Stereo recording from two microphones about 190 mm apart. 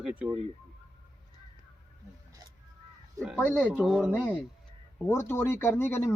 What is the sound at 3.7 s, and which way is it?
Speech, 5° right (ahead or behind).